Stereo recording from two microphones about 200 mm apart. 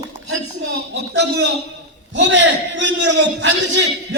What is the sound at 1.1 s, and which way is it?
A man's voice, 60° right (ahead or behind).